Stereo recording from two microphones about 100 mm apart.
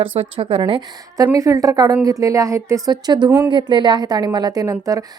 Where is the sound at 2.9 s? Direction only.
45° right (ahead or behind).